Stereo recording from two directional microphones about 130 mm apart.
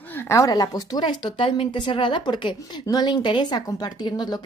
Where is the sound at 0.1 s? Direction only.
20° left (ahead or behind).